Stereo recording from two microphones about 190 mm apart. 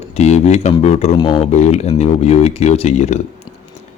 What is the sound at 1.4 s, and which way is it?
Speech, 35° left (ahead or behind).